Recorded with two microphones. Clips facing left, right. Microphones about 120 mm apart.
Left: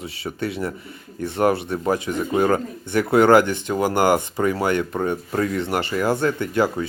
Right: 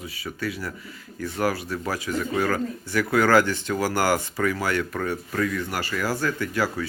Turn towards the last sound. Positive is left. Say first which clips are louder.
# left 5 dB
turn(degrees=25)  # may be behind; listen again after turning